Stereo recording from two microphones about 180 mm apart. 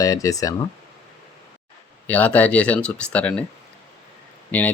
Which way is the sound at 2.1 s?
10° left (ahead or behind).